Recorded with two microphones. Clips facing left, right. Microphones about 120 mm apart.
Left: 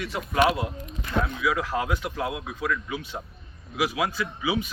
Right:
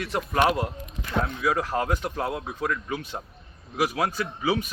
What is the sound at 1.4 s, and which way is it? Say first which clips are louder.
Speech: right 1 dB; 40° right (ahead or behind).